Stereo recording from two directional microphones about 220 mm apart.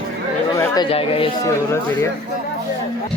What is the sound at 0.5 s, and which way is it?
Speech, 15° left (ahead or behind).